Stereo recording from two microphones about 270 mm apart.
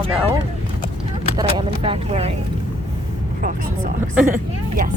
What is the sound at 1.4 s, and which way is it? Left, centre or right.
Speech, centre.